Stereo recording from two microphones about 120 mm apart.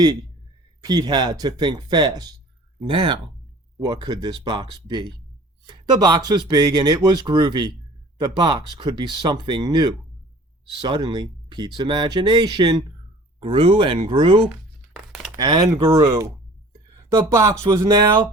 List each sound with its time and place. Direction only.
0.8 s speech: 35° right (ahead or behind)